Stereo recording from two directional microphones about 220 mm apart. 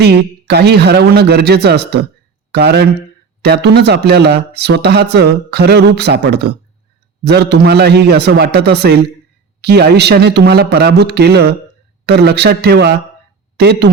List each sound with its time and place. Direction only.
0.0 s speech: 50° right (ahead or behind)